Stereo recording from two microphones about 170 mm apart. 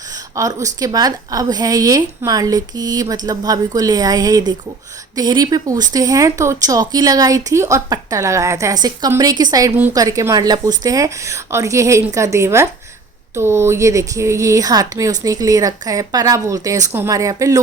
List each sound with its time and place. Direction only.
0.3 s speech: 20° right (ahead or behind)